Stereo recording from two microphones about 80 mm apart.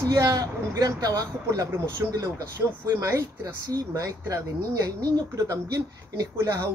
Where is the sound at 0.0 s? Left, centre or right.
Right.